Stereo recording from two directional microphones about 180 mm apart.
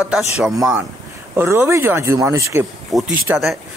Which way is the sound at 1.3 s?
10° right (ahead or behind).